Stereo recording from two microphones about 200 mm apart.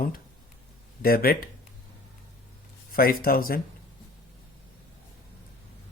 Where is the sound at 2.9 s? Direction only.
45° left (ahead or behind).